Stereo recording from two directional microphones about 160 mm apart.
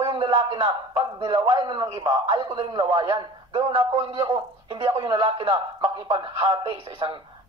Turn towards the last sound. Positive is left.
turn(degrees=-30)  # may be behind; listen again after turning